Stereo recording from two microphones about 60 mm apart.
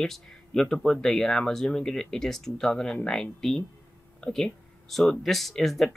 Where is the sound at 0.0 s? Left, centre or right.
Centre.